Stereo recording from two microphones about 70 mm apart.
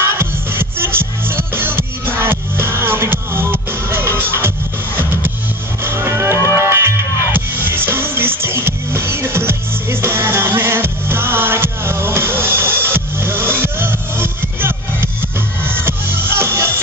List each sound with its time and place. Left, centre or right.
0.0 s music: right